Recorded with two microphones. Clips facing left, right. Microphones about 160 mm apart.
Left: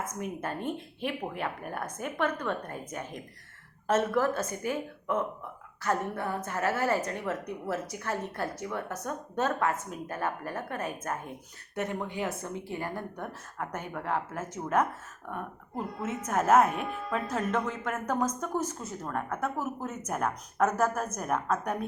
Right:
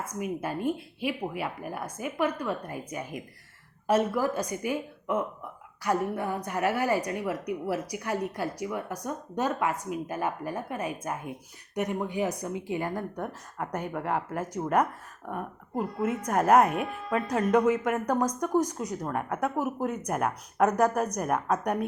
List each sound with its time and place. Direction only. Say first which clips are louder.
0.0 s a woman's voice: right 2 dB; 10° right (ahead or behind)